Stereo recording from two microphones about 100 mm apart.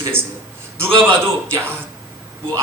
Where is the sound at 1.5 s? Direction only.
25° right (ahead or behind).